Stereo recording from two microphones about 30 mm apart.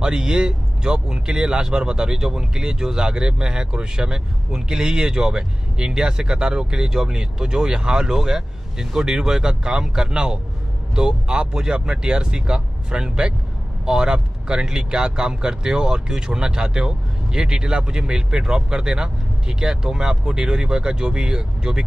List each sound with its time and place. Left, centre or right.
0.0 s speech: right